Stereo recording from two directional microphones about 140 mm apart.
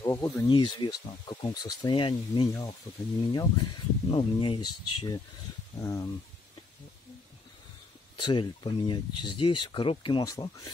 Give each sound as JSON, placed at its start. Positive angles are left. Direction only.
{"t": 0.0, "sound": "speech", "side_deg": 20}
{"t": 0.5, "sound": "speech", "side_deg": 35}
{"t": 8.2, "sound": "speech", "side_deg": 35}